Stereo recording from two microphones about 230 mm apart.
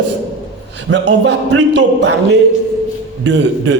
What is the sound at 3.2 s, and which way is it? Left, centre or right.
Speech, right.